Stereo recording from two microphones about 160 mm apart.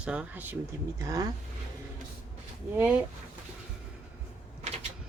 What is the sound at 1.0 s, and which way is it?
Speech, 20° right (ahead or behind).